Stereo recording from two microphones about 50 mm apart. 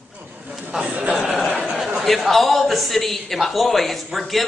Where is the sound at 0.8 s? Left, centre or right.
Right.